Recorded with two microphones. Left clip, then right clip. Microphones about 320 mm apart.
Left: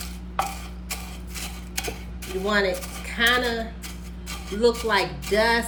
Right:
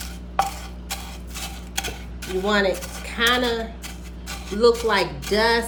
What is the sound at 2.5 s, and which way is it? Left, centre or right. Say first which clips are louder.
Speech: right 2 dB; centre.